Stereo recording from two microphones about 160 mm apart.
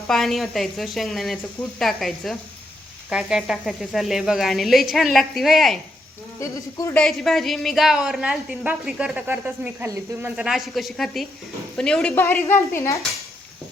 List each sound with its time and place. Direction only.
0.1 s a woman's voice: centre (ahead or behind)
6.4 s speech: 20° left (ahead or behind)
7.0 s a woman's voice: centre (ahead or behind); by 13.0 s 15° left (ahead or behind)